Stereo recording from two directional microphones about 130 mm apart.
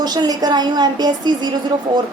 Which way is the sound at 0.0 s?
30° right (ahead or behind).